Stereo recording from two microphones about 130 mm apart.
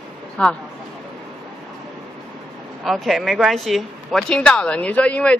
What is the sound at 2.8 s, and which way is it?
Speech, centre (ahead or behind).